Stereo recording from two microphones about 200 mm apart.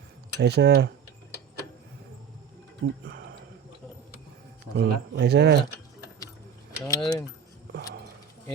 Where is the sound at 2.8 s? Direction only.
55° right (ahead or behind).